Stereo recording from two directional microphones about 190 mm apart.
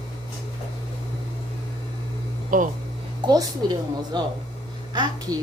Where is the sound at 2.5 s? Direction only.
45° right (ahead or behind).